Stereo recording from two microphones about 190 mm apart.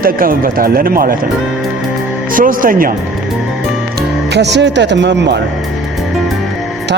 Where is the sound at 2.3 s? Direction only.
45° right (ahead or behind).